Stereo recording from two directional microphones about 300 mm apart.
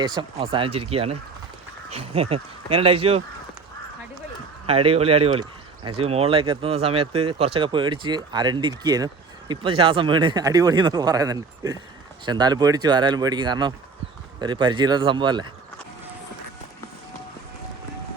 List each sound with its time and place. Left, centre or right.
0.0 s speech: centre
4.6 s speech: centre